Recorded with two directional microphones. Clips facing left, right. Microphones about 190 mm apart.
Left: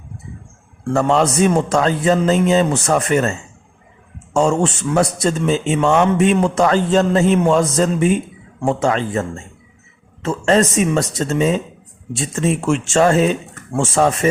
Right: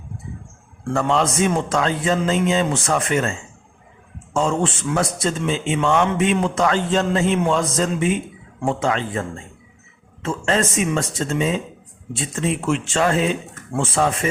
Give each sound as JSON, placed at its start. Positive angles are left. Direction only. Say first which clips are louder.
{"t": 0.9, "sound": "a man's voice", "louder": "left 4 dB", "side_deg": 40}
{"t": 4.4, "sound": "a man's voice", "louder": "left 4 dB", "side_deg": 40}